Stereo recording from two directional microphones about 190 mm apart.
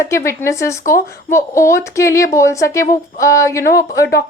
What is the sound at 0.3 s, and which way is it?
Speech, 15° left (ahead or behind).